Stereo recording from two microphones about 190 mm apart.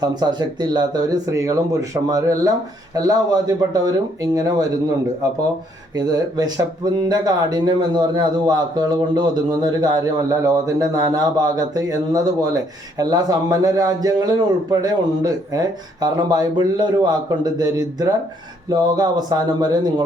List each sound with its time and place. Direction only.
0.0 s speech: 20° right (ahead or behind)
6.0 s speech: 20° right (ahead or behind)